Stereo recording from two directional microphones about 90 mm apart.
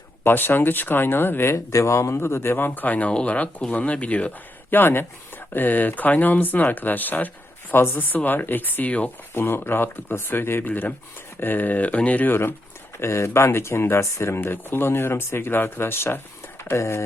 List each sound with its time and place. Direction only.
0.3 s speech: 25° left (ahead or behind)